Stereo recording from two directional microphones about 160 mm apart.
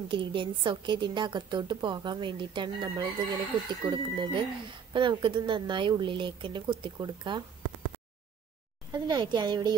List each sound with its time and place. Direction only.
0.1 s a woman's voice: 30° right (ahead or behind)
8.9 s a woman's voice: 25° right (ahead or behind)